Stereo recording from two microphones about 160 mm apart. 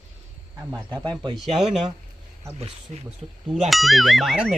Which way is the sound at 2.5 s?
40° right (ahead or behind).